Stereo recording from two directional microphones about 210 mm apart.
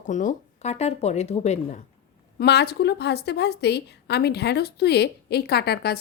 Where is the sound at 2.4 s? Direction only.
50° left (ahead or behind).